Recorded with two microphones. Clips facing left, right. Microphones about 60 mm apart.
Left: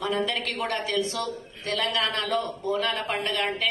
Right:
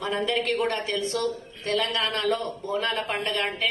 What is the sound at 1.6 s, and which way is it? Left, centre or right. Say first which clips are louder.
A woman's voice: right 1 dB; right.